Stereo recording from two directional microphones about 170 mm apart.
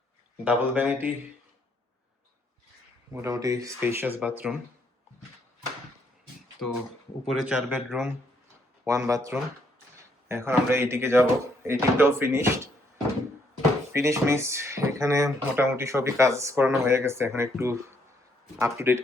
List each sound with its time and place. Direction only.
0.4 s speech: 10° right (ahead or behind)
3.1 s speech: 15° right (ahead or behind)
7.3 s speech: 5° right (ahead or behind)
9.0 s speech: 15° right (ahead or behind)
13.9 s speech: 15° right (ahead or behind)